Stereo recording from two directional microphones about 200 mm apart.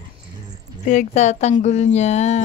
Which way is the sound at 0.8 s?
35° left (ahead or behind).